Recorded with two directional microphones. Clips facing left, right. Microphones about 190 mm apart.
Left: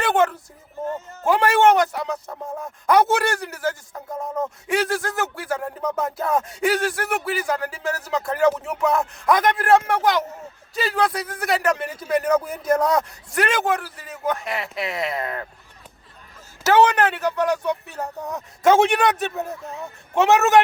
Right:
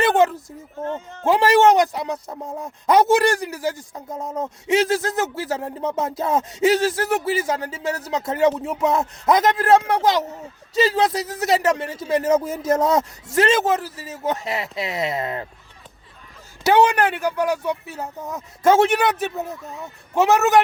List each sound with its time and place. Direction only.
0.0 s a sound: 20° right (ahead or behind)
0.9 s speech: 5° left (ahead or behind)
1.3 s speech: 20° right (ahead or behind)
16.6 s speech: 10° right (ahead or behind)